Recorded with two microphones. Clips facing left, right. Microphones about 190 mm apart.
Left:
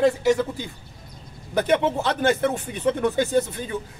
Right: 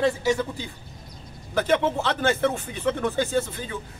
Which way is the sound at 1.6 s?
15° left (ahead or behind).